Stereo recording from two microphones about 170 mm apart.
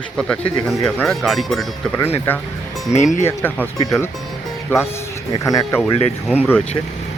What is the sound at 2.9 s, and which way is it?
Speech, 45° left (ahead or behind).